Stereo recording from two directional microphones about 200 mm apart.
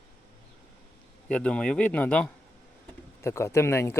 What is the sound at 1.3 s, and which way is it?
Speech, 5° left (ahead or behind).